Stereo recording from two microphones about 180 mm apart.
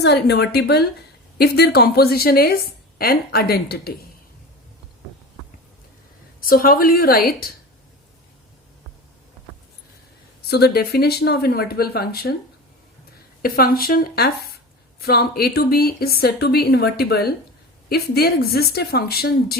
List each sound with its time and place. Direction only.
0.0 s a woman's voice: 65° left (ahead or behind)
6.4 s a woman's voice: 55° left (ahead or behind)
10.5 s a woman's voice: 65° left (ahead or behind)
13.4 s a woman's voice: 55° left (ahead or behind)